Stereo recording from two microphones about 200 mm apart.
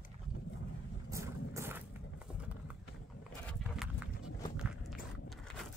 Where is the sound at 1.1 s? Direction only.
15° right (ahead or behind).